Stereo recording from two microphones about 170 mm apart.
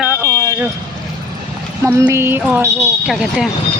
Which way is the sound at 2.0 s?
15° right (ahead or behind).